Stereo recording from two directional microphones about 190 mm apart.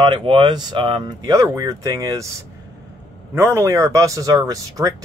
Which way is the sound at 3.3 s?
15° right (ahead or behind).